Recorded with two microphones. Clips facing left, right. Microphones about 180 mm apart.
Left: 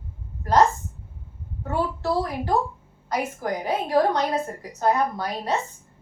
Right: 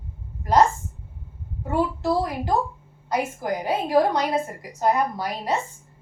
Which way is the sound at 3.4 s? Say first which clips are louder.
Right 1 dB; 10° right (ahead or behind).